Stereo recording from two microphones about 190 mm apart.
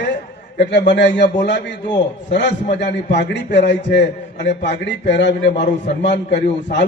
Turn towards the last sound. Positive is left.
turn(degrees=65)  # may be behind; listen again after turning